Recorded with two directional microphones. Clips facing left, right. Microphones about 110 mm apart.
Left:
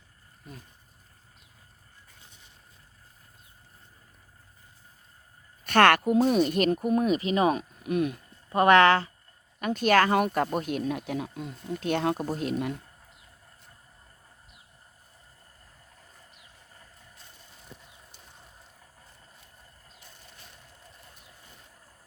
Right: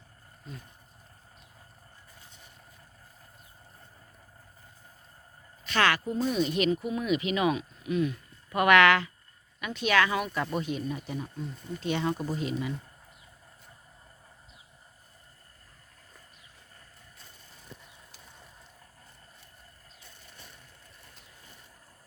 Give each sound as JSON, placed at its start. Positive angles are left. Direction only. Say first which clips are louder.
{"t": 5.6, "sound": "speech", "louder": "left 7 dB", "side_deg": 55}
{"t": 7.8, "sound": "speech", "louder": "left 2 dB", "side_deg": 55}
{"t": 8.4, "sound": "speech", "louder": "left 2 dB", "side_deg": 30}
{"t": 9.6, "sound": "speech", "louder": "left 4 dB", "side_deg": 45}